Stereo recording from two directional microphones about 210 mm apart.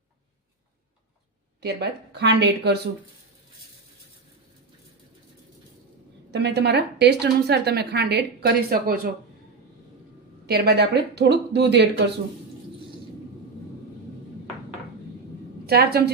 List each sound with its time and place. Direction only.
1.6 s a woman's voice: 50° right (ahead or behind)
6.3 s a woman's voice: 55° right (ahead or behind)
10.4 s a woman's voice: 50° right (ahead or behind)
15.6 s a woman's voice: 50° right (ahead or behind)